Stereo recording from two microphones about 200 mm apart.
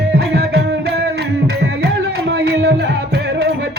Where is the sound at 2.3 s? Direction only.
55° right (ahead or behind).